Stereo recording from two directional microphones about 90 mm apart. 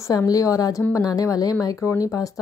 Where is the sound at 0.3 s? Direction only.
40° left (ahead or behind).